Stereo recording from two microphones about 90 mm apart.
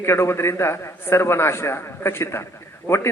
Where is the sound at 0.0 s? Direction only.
30° left (ahead or behind).